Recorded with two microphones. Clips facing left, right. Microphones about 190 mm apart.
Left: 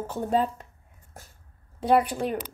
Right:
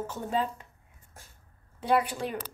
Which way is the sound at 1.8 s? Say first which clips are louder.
Left 4 dB; 35° left (ahead or behind).